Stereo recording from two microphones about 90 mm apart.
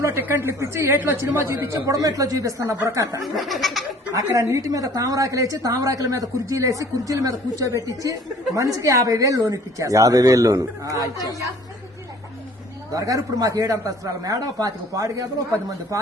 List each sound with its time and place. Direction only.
0.0 s a woman's voice: 25° right (ahead or behind)
3.2 s laughter: centre (ahead or behind)
4.1 s a woman's voice: 35° right (ahead or behind)
12.9 s a woman's voice: 40° right (ahead or behind)